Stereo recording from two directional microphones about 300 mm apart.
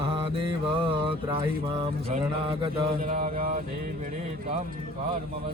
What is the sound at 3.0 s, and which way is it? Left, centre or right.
Mantra, right.